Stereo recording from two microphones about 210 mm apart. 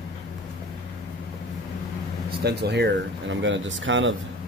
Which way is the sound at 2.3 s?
50° right (ahead or behind).